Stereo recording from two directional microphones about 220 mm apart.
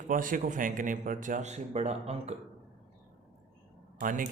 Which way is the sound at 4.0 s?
35° right (ahead or behind).